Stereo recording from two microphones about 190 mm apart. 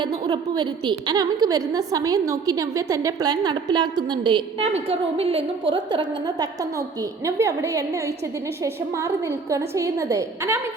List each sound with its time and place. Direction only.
0.0 s a woman's voice: 25° right (ahead or behind)